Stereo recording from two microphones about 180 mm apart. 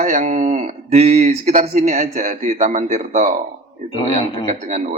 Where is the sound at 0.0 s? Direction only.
45° right (ahead or behind).